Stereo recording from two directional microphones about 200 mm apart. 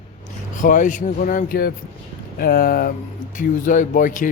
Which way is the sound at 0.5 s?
40° left (ahead or behind).